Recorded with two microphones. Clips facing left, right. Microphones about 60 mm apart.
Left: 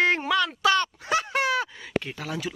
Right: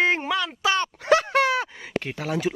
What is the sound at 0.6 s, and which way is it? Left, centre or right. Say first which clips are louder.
Speech: left 1 dB; right.